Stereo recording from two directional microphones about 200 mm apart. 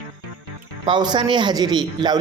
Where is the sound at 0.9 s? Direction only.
20° right (ahead or behind).